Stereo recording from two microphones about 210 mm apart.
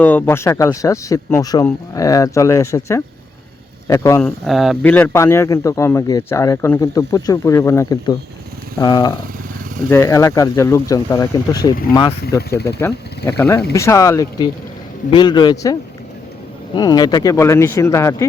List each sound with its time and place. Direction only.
0.0 s speech: 10° left (ahead or behind)
4.4 s a man's voice: centre (ahead or behind); by 11.7 s 15° left (ahead or behind)
12.4 s speech: 50° left (ahead or behind)
12.6 s a man's voice: 10° left (ahead or behind)